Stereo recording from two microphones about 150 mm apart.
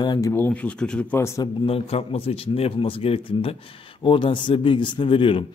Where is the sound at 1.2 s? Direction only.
20° left (ahead or behind).